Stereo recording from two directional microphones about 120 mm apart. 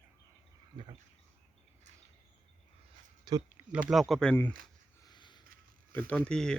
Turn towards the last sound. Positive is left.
turn(degrees=5)  # may be behind; listen again after turning